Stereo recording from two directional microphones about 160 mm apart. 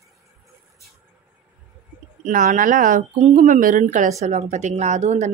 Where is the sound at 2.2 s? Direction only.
55° right (ahead or behind).